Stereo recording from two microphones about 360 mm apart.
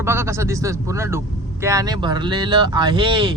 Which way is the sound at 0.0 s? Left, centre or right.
Centre.